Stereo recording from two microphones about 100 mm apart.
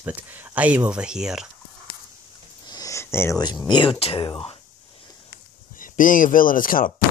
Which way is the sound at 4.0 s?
65° left (ahead or behind).